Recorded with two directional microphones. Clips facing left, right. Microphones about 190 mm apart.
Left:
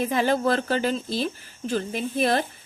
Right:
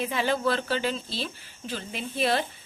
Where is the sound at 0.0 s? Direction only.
45° left (ahead or behind).